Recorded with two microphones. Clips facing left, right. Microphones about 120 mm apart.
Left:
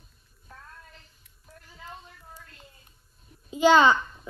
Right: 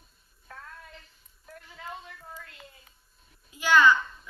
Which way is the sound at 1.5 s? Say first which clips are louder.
Right 4 dB; 65° right (ahead or behind).